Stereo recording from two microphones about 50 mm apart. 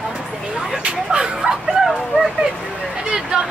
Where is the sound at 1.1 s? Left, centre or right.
Centre.